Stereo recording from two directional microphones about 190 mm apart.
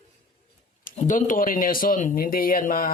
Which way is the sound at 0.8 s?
45° left (ahead or behind).